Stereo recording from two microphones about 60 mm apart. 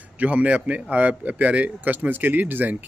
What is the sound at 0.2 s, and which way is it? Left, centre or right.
A man's voice, right.